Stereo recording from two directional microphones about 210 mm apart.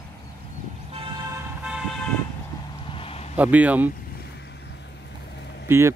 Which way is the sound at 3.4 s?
5° right (ahead or behind).